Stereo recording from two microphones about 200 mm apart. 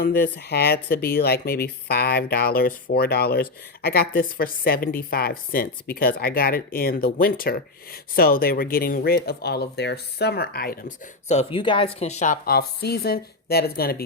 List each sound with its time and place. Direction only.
0.0 s speech: 50° left (ahead or behind)